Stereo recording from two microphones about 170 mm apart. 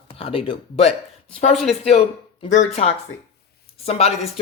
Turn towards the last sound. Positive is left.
turn(degrees=40)  # may be behind; listen again after turning